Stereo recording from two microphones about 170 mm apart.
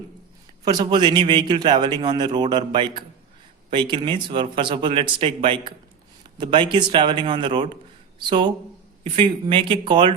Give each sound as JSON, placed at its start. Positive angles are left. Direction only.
{"t": 0.6, "sound": "speech", "side_deg": -25}